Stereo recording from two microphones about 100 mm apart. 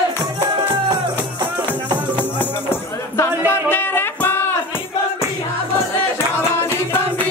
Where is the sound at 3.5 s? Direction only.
20° left (ahead or behind).